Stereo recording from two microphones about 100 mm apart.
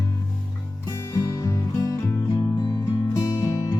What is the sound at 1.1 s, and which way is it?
Music, 30° left (ahead or behind).